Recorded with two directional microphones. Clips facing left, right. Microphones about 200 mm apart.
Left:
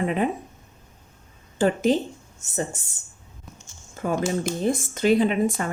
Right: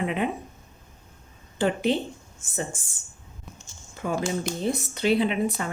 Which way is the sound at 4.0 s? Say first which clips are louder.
Left 3 dB; 45° left (ahead or behind).